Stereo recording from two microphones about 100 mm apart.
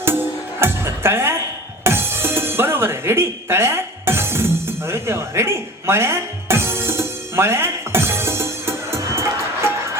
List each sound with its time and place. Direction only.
0.6 s music: 25° right (ahead or behind)